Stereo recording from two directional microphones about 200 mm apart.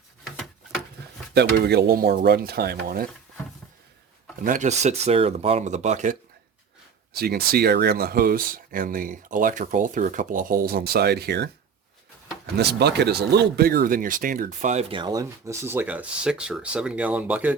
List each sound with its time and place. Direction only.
0.3 s a sound: centre (ahead or behind)
1.3 s speech: 55° right (ahead or behind)
4.4 s speech: 40° right (ahead or behind)
7.1 s speech: 50° right (ahead or behind)
12.5 s speech: 55° right (ahead or behind); by 17.5 s 10° right (ahead or behind)